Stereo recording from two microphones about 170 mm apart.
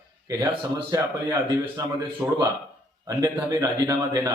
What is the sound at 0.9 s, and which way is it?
Speech, 20° right (ahead or behind).